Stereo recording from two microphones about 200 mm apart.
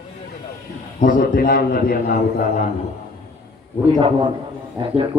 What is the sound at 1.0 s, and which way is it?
A man's voice, 40° left (ahead or behind).